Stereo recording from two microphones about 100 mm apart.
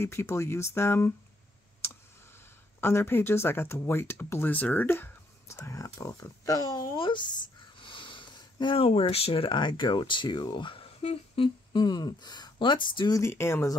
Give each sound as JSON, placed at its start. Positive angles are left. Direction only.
{"t": 0.0, "sound": "speech", "side_deg": 25}
{"t": 2.8, "sound": "speech", "side_deg": 25}
{"t": 7.0, "sound": "a sound", "side_deg": 50}
{"t": 8.7, "sound": "speech", "side_deg": 70}
{"t": 11.7, "sound": "speech", "side_deg": 45}
{"t": 13.1, "sound": "speech", "side_deg": 25}